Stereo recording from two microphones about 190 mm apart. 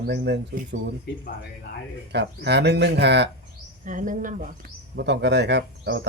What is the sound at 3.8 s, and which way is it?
Speech, 45° right (ahead or behind).